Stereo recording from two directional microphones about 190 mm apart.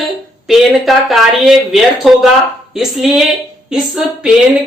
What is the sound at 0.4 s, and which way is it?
Speech, centre (ahead or behind).